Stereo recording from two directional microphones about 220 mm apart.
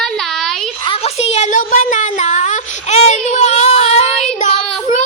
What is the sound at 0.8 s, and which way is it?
Speech, 25° left (ahead or behind).